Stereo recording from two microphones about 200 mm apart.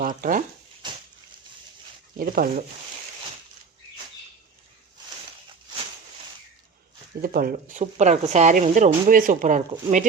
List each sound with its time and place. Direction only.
0.0 s speech: 45° right (ahead or behind)
0.8 s a sound: 25° right (ahead or behind)
2.1 s speech: 45° right (ahead or behind)
7.2 s speech: 45° right (ahead or behind)